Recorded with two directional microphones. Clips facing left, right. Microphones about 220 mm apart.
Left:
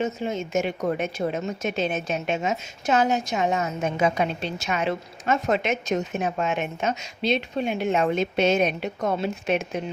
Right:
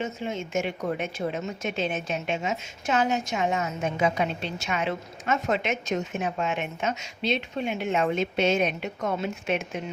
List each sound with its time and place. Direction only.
0.0 s a woman's voice: 40° left (ahead or behind)